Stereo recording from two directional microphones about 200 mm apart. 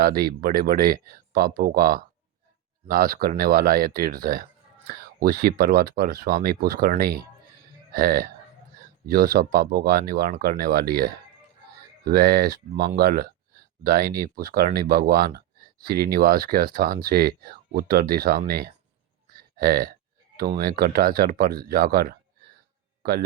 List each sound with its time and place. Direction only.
0.0 s speech: 50° right (ahead or behind)